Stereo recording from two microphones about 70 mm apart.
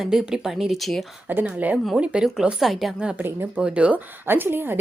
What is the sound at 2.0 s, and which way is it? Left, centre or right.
Speech, centre.